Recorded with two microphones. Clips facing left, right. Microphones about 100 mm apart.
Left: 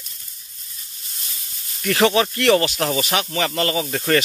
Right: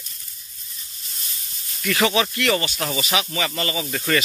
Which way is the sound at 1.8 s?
35° left (ahead or behind).